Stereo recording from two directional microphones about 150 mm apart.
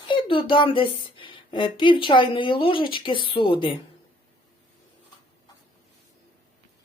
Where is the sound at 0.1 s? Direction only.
35° left (ahead or behind).